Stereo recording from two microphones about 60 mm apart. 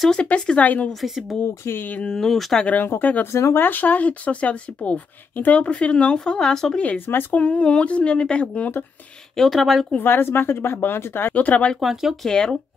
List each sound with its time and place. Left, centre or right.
0.1 s speech: centre
1.0 s speech: centre
2.6 s speech: left; by 6.8 s centre
7.1 s a woman's voice: left
7.3 s speech: centre
9.4 s speech: centre
9.9 s a woman's voice: left
11.3 s speech: left
11.8 s speech: centre
12.2 s speech: centre